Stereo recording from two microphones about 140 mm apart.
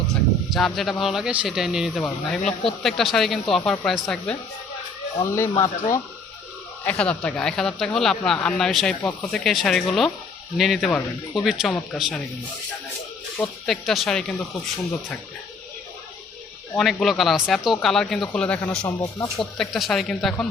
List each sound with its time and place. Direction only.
0.5 s speech: centre (ahead or behind)
5.2 s speech: 20° left (ahead or behind)
6.8 s speech: 10° left (ahead or behind)
13.4 s speech: centre (ahead or behind)
16.7 s a man's voice: centre (ahead or behind)
18.9 s speech: 30° left (ahead or behind)
19.4 s speech: centre (ahead or behind)